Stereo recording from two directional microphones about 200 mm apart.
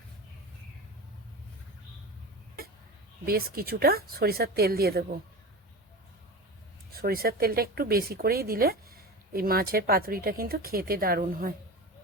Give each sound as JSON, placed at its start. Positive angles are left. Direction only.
{"t": 3.2, "sound": "speech", "side_deg": -50}
{"t": 6.9, "sound": "speech", "side_deg": -50}